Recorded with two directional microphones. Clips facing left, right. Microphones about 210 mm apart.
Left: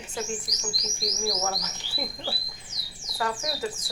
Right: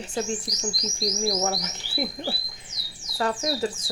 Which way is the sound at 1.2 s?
25° right (ahead or behind).